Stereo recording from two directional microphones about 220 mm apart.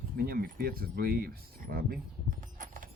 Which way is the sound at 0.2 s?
45° right (ahead or behind).